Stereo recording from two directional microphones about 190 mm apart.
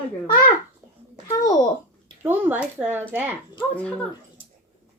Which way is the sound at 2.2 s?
10° right (ahead or behind).